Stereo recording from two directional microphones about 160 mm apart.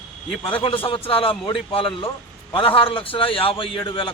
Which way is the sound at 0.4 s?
35° left (ahead or behind).